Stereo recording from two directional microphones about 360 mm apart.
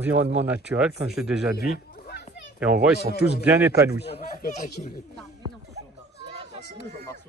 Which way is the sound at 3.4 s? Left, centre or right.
Centre.